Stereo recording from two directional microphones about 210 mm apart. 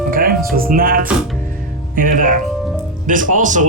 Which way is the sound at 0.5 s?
45° right (ahead or behind).